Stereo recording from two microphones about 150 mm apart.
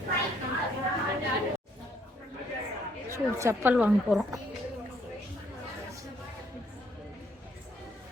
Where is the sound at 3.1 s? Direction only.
20° right (ahead or behind).